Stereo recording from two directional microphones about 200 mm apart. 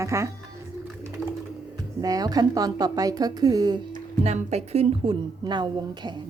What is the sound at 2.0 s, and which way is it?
A woman's voice, 20° right (ahead or behind).